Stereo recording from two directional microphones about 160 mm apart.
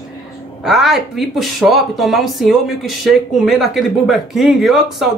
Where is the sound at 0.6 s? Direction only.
Centre (ahead or behind).